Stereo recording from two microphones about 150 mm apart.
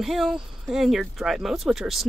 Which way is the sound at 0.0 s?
Centre (ahead or behind).